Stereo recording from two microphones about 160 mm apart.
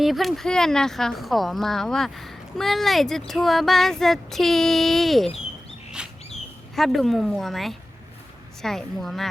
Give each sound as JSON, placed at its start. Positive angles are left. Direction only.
{"t": 0.0, "sound": "speech", "side_deg": 0}
{"t": 6.0, "sound": "a sound", "side_deg": -5}
{"t": 6.7, "sound": "speech", "side_deg": 0}